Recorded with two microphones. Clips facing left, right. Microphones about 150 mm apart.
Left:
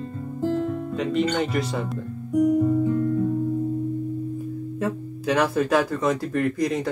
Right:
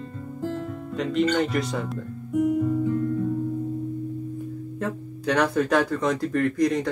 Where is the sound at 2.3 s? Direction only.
40° left (ahead or behind).